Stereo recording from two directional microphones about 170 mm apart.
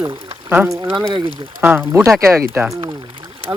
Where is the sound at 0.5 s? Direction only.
10° right (ahead or behind).